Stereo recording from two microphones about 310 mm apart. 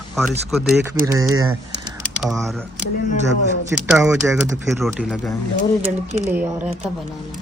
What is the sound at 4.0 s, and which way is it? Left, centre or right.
Speech, centre.